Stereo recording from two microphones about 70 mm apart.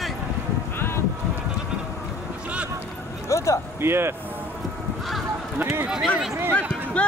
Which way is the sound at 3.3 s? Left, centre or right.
Left.